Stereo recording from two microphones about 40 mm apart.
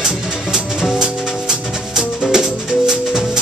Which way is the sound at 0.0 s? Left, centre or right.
Centre.